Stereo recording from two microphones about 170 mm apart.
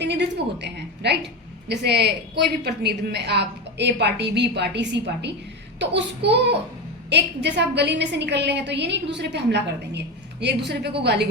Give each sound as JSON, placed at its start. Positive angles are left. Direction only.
{"t": 0.0, "sound": "a woman's voice", "side_deg": -90}